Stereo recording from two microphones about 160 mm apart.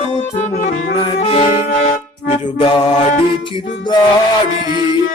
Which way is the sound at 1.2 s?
40° left (ahead or behind).